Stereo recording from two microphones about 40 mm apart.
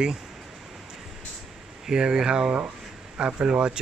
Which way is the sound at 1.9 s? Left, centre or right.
Centre.